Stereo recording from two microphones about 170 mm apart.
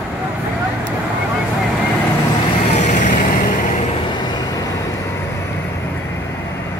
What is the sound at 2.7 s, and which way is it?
Vehicle, 45° left (ahead or behind).